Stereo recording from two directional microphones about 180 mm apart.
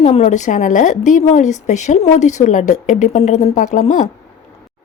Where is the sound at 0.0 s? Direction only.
35° left (ahead or behind).